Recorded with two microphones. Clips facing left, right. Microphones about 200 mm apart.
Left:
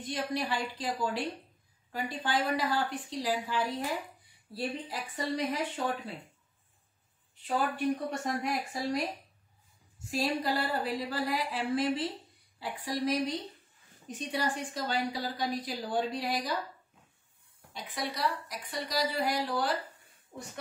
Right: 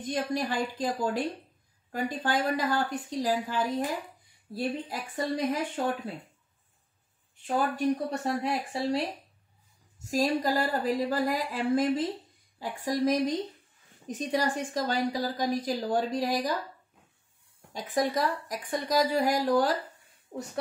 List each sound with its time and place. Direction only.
0.0 s a woman's voice: 45° right (ahead or behind)
4.8 s a woman's voice: 50° right (ahead or behind)
7.4 s a woman's voice: 45° right (ahead or behind)
8.4 s speech: 30° right (ahead or behind)
9.9 s a woman's voice: 40° right (ahead or behind)
17.7 s a woman's voice: 45° right (ahead or behind)